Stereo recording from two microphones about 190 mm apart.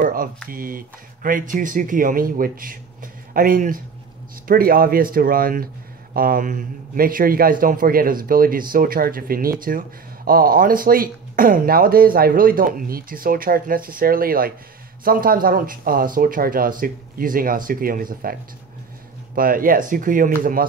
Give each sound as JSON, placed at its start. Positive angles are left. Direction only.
{"t": 0.0, "sound": "a man's voice", "side_deg": -45}